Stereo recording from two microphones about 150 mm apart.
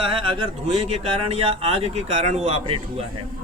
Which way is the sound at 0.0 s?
35° right (ahead or behind).